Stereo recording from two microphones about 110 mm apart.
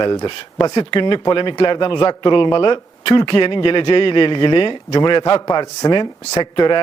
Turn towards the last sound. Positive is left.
turn(degrees=45)  # may be behind; listen again after turning